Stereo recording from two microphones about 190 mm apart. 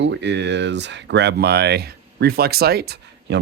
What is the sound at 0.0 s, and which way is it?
Speech, 70° right (ahead or behind).